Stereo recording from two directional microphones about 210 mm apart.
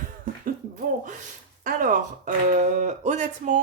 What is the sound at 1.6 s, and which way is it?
Speech, 40° right (ahead or behind).